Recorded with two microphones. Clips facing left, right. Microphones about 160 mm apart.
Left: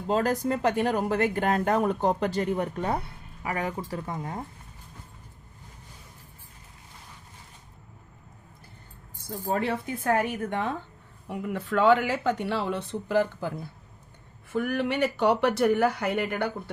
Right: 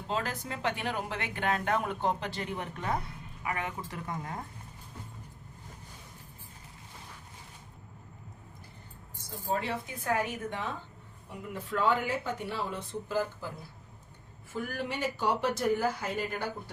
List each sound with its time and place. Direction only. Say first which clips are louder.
0.1 s speech: left 10 dB; 45° left (ahead or behind)
9.5 s a woman's voice: left 5 dB; 50° left (ahead or behind)
11.3 s speech: left 7 dB; 70° left (ahead or behind)
14.5 s speech: left 8 dB; 65° left (ahead or behind)